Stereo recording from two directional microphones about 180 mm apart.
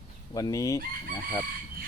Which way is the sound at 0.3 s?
20° left (ahead or behind).